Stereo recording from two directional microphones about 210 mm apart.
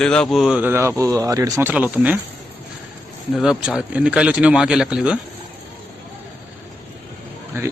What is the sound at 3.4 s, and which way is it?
Speech, 5° right (ahead or behind).